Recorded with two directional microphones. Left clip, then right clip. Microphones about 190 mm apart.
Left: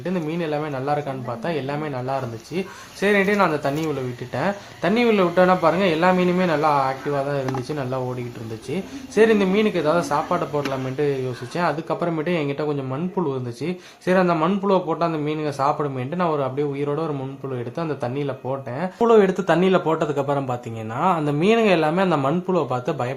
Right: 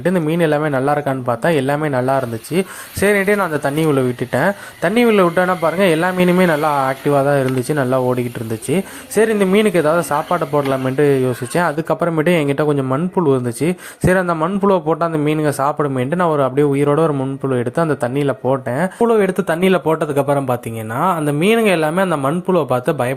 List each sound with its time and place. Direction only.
0.0 s a man's voice: 40° right (ahead or behind)